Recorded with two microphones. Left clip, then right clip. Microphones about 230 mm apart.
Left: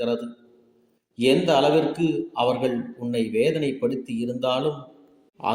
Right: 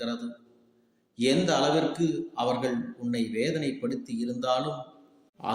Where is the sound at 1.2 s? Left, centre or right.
Centre.